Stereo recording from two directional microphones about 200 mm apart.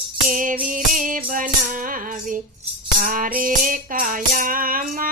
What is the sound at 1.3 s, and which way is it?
Music, 40° right (ahead or behind).